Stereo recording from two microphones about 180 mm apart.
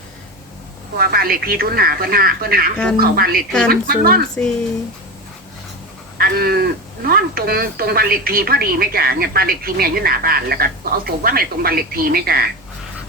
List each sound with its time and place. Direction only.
0.9 s speech: 55° right (ahead or behind)
6.1 s speech: 55° right (ahead or behind)